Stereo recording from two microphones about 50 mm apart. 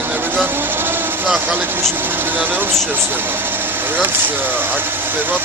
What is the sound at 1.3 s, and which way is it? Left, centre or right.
Speech, right.